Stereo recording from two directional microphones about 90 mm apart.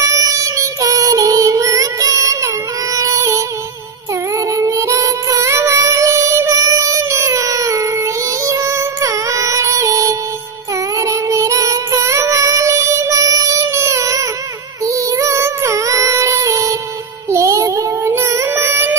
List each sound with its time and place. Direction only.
0.0 s child singing: 35° right (ahead or behind)
4.5 s music: 35° right (ahead or behind)
11.0 s child singing: 35° right (ahead or behind)
17.3 s music: 35° right (ahead or behind)